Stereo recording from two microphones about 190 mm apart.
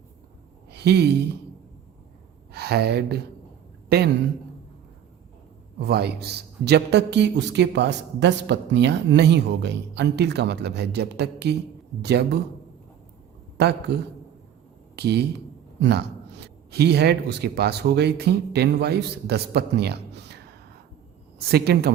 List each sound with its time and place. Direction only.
0.7 s speech: 60° right (ahead or behind)
2.5 s speech: 60° right (ahead or behind)
5.8 s a man's voice: 60° right (ahead or behind)
13.6 s a man's voice: 60° right (ahead or behind)
21.4 s a man's voice: 55° right (ahead or behind)